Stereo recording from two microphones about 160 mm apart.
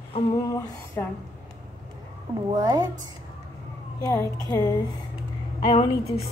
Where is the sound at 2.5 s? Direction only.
25° right (ahead or behind).